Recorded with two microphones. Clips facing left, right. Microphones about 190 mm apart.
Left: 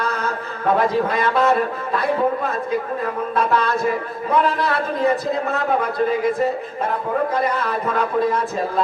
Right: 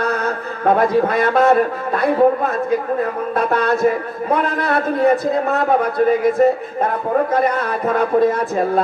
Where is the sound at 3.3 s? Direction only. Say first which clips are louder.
Right 2 dB; 50° right (ahead or behind).